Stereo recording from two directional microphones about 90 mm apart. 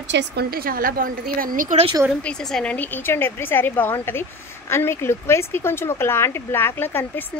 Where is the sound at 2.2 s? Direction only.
10° left (ahead or behind).